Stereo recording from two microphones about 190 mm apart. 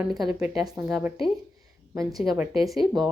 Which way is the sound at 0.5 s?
20° right (ahead or behind).